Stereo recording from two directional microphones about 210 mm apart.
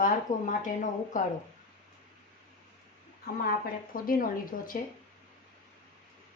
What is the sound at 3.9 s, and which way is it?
Speech, 40° left (ahead or behind).